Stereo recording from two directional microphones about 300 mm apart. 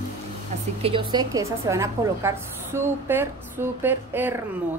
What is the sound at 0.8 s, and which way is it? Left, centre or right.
A woman's voice, centre.